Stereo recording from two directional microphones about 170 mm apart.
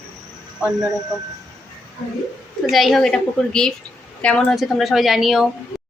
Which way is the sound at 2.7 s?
Centre (ahead or behind).